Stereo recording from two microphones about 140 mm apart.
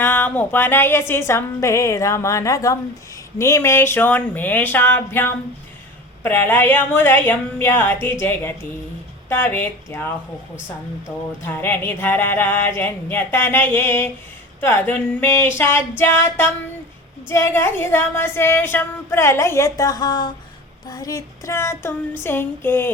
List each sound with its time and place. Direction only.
0.0 s a woman's voice: 15° left (ahead or behind)
9.3 s speech: 15° left (ahead or behind)
11.4 s a woman's voice: 15° left (ahead or behind)